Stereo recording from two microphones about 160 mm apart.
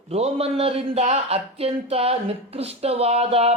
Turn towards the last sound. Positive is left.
turn(degrees=-40)  # may be behind; listen again after turning